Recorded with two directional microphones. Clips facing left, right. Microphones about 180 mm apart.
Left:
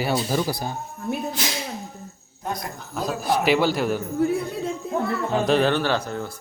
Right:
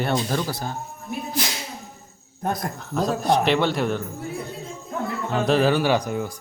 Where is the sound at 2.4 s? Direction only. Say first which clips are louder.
Right 4 dB; 55° right (ahead or behind).